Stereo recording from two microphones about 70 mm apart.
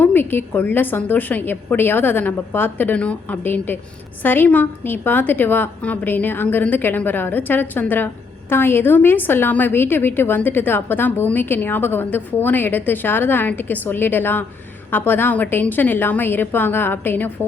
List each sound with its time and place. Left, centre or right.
0.0 s a woman's voice: left